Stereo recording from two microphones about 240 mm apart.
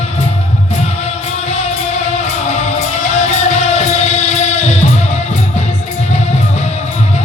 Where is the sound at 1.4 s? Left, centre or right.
Left.